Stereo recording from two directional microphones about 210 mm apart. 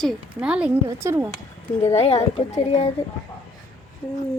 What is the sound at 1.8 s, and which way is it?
Speech, 30° left (ahead or behind).